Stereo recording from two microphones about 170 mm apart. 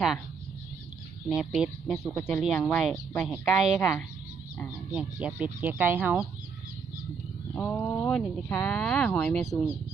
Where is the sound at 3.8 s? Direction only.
15° left (ahead or behind).